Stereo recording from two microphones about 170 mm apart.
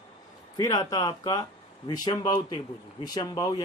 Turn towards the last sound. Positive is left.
turn(degrees=20)  # may be behind; listen again after turning